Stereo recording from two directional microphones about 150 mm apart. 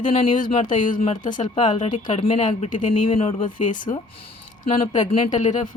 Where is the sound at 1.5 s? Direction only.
50° left (ahead or behind).